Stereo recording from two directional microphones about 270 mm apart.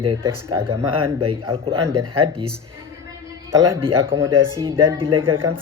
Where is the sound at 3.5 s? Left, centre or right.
Centre.